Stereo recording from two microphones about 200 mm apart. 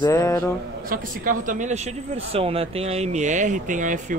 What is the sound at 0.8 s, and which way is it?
Speech, 45° right (ahead or behind).